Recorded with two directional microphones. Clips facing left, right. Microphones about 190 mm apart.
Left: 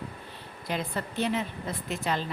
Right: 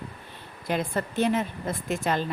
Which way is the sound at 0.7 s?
50° right (ahead or behind).